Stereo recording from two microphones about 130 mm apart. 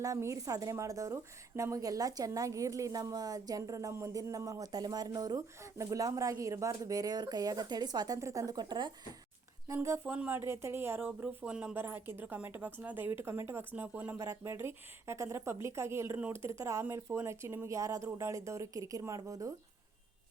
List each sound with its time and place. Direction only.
0.0 s a woman's voice: 25° right (ahead or behind)
9.6 s a woman's voice: 20° right (ahead or behind)